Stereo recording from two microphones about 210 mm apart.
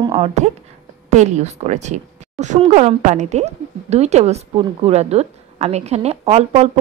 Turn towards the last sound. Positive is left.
turn(degrees=-30)  # may be behind; listen again after turning